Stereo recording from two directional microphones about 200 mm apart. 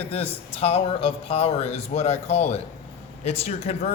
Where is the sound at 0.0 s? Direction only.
30° left (ahead or behind).